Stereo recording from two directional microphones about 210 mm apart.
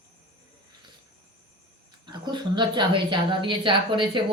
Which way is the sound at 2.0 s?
20° right (ahead or behind).